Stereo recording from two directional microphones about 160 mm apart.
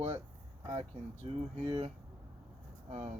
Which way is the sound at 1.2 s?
40° right (ahead or behind).